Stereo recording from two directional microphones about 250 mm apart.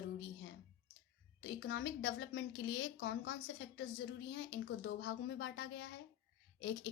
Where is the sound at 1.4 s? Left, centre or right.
Left.